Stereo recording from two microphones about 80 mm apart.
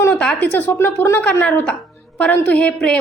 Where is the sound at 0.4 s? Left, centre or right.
Left.